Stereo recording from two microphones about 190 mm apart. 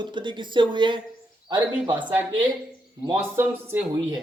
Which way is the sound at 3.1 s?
10° right (ahead or behind).